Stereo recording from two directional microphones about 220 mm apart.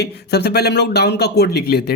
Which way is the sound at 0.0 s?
50° left (ahead or behind).